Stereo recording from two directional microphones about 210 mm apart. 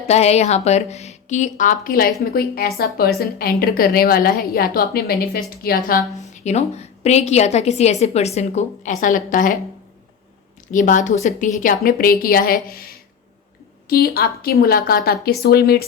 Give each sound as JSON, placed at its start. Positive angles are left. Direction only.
{"t": 0.0, "sound": "a woman's voice", "side_deg": 30}
{"t": 6.4, "sound": "a woman's voice", "side_deg": 30}
{"t": 10.7, "sound": "a woman's voice", "side_deg": 40}